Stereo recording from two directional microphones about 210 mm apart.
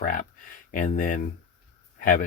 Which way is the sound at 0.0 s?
40° left (ahead or behind).